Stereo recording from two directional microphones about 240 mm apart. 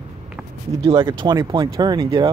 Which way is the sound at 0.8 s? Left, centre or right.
Right.